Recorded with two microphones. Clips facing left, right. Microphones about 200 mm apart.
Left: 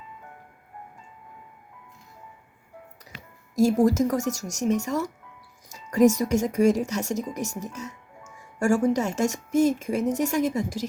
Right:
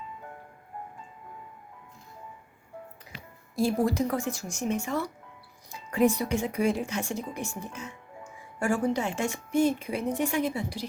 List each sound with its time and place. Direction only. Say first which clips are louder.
3.5 s speech: left 6 dB; 45° left (ahead or behind)